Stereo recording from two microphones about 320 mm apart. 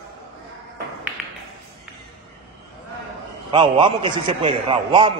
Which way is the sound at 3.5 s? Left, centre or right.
Centre.